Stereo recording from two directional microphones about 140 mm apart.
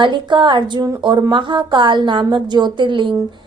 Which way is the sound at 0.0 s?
35° right (ahead or behind).